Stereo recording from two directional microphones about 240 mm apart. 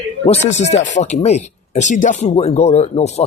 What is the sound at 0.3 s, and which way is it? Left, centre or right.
Speech, left.